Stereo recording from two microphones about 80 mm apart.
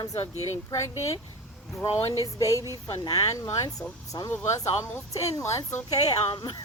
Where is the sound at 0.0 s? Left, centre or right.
Left.